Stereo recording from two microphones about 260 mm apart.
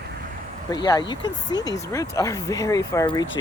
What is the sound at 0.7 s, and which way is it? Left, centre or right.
Speech, centre.